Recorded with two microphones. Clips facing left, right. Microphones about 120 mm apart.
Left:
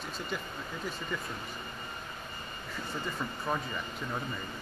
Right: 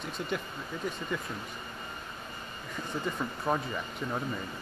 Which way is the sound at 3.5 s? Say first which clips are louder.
Right 4 dB; 15° right (ahead or behind).